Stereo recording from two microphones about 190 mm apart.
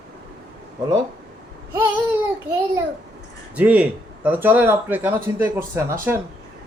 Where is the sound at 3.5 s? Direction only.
5° right (ahead or behind).